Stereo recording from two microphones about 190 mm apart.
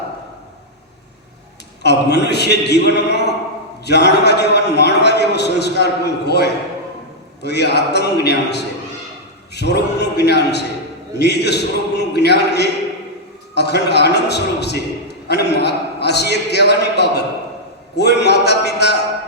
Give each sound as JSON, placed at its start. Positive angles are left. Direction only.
{"t": 1.8, "sound": "a man's voice", "side_deg": 60}